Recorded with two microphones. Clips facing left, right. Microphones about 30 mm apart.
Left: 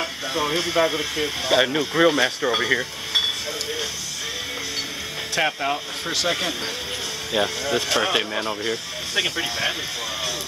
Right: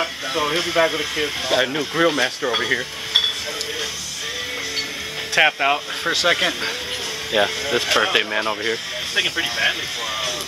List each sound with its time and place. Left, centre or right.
0.0 s speech: centre
1.6 s speech: centre
5.3 s speech: right
7.3 s speech: right